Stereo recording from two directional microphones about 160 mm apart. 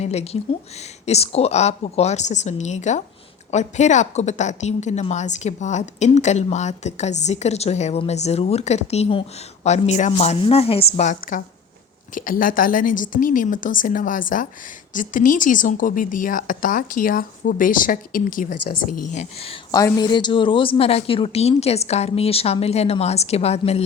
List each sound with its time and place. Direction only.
0.0 s a woman's voice: 40° left (ahead or behind)
10.9 s a woman's voice: 50° left (ahead or behind)
19.7 s a woman's voice: 25° left (ahead or behind); by 23.8 s 40° left (ahead or behind)